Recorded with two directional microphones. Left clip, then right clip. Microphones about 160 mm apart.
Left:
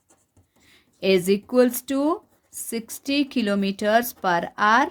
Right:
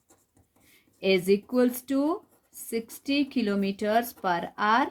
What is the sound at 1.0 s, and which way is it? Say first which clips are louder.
Speech: left 3 dB; 50° left (ahead or behind).